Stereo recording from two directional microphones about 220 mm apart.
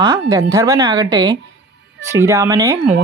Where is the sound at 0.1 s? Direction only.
15° right (ahead or behind).